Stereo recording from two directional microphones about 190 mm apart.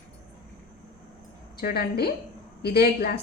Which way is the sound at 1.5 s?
55° left (ahead or behind).